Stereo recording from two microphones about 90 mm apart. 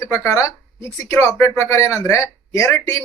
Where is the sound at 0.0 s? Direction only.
35° left (ahead or behind).